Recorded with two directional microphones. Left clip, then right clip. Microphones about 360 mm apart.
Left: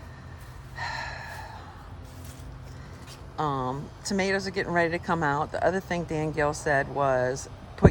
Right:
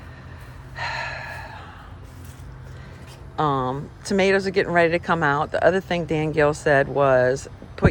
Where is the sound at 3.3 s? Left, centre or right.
Centre.